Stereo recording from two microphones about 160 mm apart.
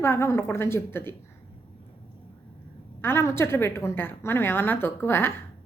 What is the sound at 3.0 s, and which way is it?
A woman's voice, 15° left (ahead or behind).